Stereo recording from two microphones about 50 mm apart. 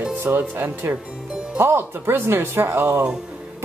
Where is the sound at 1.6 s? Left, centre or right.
Right.